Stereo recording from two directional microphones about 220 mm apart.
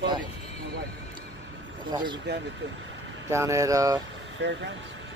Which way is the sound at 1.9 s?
20° right (ahead or behind).